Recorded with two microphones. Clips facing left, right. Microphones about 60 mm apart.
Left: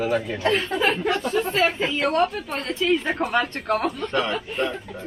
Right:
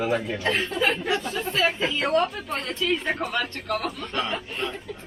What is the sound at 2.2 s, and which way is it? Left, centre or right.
Speech, left.